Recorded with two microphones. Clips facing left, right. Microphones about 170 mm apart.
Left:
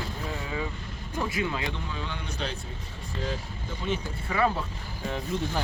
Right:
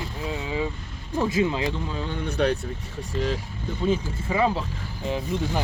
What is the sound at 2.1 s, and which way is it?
Speech, 60° right (ahead or behind).